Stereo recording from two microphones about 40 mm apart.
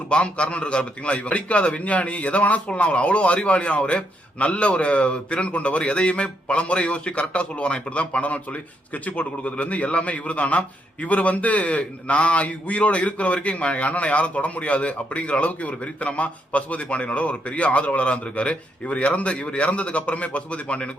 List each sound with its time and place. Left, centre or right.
0.1 s a man's voice: left